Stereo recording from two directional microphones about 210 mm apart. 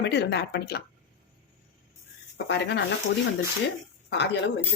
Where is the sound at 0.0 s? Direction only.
55° left (ahead or behind).